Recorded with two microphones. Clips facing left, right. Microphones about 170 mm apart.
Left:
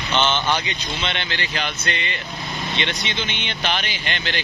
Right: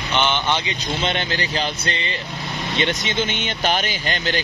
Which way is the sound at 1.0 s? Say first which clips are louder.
Right 5 dB; 40° right (ahead or behind).